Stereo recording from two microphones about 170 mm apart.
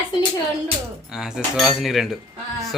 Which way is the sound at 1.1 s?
5° right (ahead or behind).